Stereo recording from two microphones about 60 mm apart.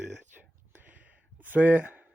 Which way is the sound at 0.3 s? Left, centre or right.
Right.